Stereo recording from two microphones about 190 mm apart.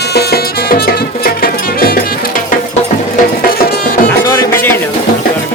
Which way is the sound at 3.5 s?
45° left (ahead or behind).